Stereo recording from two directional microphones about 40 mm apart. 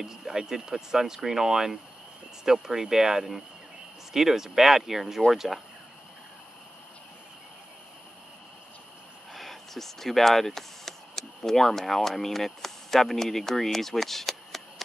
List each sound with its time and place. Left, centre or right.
0.0 s speech: centre
9.3 s speech: centre